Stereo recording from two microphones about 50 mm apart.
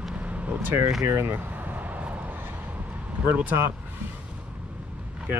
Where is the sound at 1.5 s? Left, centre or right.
Right.